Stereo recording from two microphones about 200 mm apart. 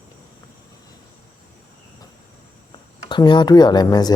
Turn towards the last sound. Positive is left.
turn(degrees=20)  # may be behind; listen again after turning